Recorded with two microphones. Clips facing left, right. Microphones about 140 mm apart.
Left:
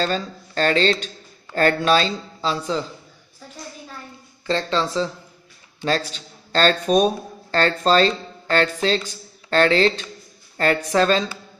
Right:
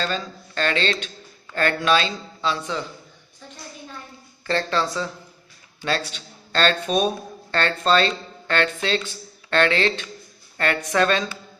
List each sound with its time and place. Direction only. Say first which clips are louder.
0.0 s speech: left 4 dB; 40° left (ahead or behind)
4.5 s speech: left 1 dB; 20° left (ahead or behind)